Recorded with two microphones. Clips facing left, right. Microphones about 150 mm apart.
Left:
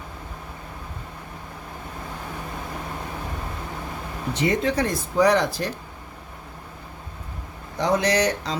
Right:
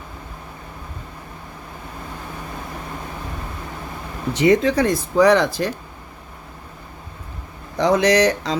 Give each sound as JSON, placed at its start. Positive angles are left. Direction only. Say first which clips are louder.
{"t": 4.4, "sound": "speech", "louder": "right 7 dB", "side_deg": -90}
{"t": 7.8, "sound": "speech", "louder": "right 5 dB", "side_deg": -90}